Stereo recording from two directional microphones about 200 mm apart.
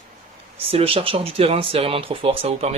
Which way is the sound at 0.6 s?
30° right (ahead or behind).